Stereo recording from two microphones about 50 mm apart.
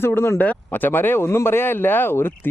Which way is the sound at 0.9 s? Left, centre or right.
Left.